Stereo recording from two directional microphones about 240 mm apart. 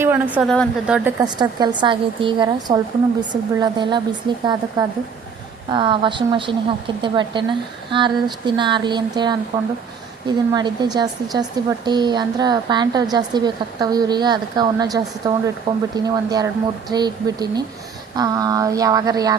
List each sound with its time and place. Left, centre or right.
0.0 s a woman's voice: centre
1.2 s a woman's voice: centre